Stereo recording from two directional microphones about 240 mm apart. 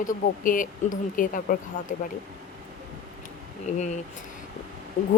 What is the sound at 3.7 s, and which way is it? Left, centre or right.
Speech, left.